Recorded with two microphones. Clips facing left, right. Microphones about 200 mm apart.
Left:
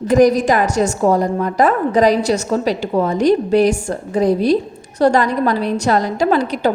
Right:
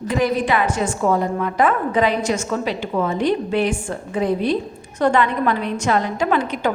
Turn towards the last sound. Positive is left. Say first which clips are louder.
# left 4 dB
turn(degrees=35)  # may be behind; listen again after turning